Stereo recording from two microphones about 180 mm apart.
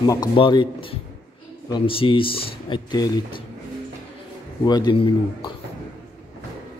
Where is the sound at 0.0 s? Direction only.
20° left (ahead or behind).